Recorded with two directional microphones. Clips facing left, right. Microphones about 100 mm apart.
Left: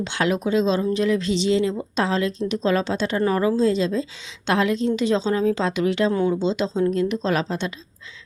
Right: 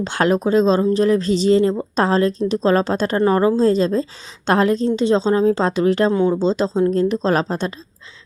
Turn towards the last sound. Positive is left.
turn(degrees=-40)  # may be behind; listen again after turning